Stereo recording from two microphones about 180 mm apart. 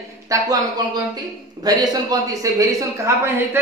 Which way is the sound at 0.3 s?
20° right (ahead or behind).